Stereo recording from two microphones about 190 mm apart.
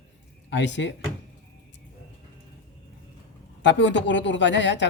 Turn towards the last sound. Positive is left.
turn(degrees=70)  # may be behind; listen again after turning